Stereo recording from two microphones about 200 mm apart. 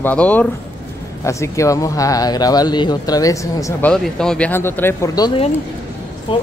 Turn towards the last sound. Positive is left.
turn(degrees=25)  # may be behind; listen again after turning